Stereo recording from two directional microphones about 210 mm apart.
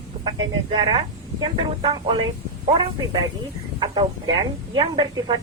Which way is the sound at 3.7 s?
20° right (ahead or behind).